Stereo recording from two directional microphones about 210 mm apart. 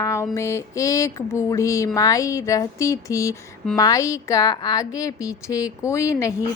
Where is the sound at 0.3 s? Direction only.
15° left (ahead or behind).